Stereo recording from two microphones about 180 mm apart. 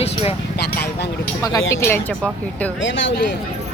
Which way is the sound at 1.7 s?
15° left (ahead or behind).